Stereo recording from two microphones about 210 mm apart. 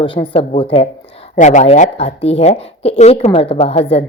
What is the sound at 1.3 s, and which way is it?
Speech, 35° left (ahead or behind).